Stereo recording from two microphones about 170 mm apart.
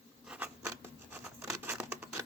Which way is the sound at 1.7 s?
5° right (ahead or behind).